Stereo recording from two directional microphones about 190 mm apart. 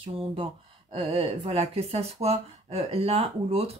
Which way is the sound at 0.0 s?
30° right (ahead or behind).